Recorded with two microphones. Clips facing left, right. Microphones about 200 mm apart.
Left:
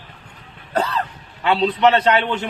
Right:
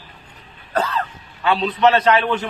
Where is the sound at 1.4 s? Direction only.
30° left (ahead or behind).